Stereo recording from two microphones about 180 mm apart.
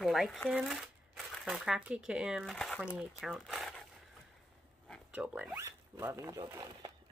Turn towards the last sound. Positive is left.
turn(degrees=-20)  # may be behind; listen again after turning